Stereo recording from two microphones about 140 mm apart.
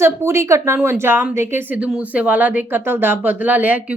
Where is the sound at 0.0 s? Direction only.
20° right (ahead or behind).